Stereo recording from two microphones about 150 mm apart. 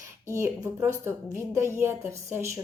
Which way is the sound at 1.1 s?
15° right (ahead or behind).